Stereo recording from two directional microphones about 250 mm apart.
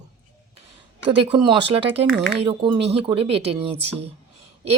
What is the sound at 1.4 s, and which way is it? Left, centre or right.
A woman's voice, centre.